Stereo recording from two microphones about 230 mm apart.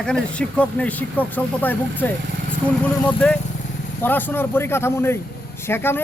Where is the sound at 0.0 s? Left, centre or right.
Centre.